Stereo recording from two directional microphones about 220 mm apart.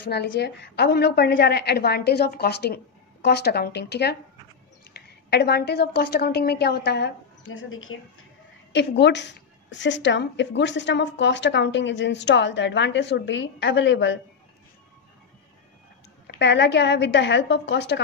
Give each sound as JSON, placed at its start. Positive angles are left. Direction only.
{"t": 0.1, "sound": "a woman's voice", "side_deg": 50}
{"t": 8.7, "sound": "a woman's voice", "side_deg": 50}
{"t": 16.3, "sound": "a woman's voice", "side_deg": 50}